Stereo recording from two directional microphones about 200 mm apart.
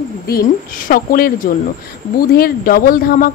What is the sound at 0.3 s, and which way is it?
A woman's voice, 45° left (ahead or behind).